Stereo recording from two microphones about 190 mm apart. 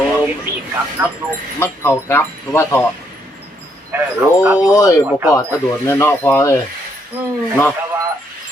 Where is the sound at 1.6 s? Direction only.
10° left (ahead or behind).